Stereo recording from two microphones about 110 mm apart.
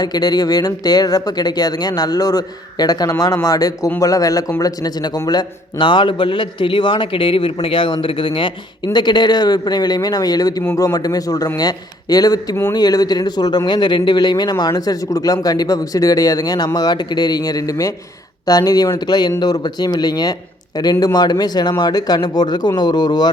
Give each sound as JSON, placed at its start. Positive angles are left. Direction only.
{"t": 0.0, "sound": "a man's voice", "side_deg": 35}